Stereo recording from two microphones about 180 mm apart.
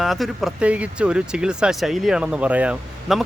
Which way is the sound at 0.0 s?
Centre (ahead or behind).